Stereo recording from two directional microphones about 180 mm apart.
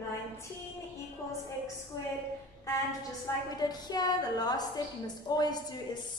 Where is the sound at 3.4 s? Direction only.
20° left (ahead or behind).